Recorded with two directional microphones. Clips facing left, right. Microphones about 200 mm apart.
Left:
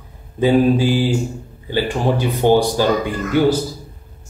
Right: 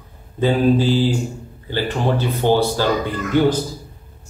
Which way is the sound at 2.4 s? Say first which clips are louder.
Left 3 dB; 15° left (ahead or behind).